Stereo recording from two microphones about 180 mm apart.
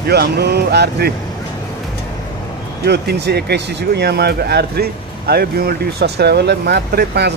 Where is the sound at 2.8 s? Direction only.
65° right (ahead or behind).